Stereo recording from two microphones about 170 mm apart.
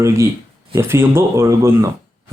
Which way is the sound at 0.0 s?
15° right (ahead or behind).